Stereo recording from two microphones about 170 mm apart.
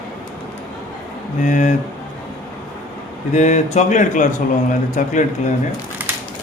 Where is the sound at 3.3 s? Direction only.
45° left (ahead or behind).